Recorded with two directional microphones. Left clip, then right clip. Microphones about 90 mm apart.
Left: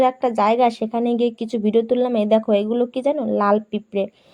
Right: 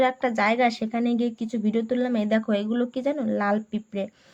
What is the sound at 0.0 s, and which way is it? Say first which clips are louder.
Speech: left 5 dB; 25° left (ahead or behind).